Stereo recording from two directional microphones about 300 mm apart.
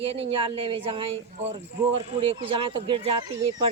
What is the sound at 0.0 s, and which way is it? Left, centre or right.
Speech, centre.